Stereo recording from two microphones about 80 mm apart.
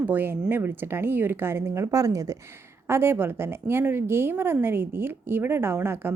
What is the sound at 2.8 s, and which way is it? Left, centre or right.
Speech, right.